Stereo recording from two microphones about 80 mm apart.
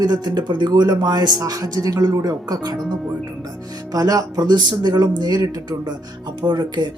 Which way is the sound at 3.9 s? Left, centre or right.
Right.